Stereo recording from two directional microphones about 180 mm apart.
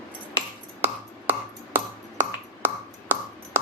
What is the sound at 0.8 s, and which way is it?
Finger snapping, 10° right (ahead or behind).